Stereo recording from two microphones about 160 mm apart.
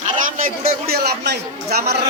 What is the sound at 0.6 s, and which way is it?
Speech, 70° right (ahead or behind).